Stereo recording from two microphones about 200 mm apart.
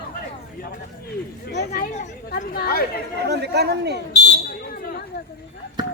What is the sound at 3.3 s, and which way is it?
Speech, 55° right (ahead or behind).